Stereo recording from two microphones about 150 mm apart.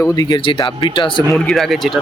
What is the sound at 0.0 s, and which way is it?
Speech, 25° left (ahead or behind).